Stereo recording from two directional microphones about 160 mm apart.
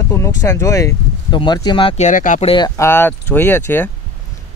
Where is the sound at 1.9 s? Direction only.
50° left (ahead or behind).